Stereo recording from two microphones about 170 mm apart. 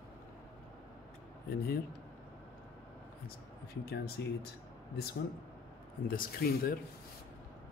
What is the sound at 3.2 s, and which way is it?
Speech, 70° left (ahead or behind).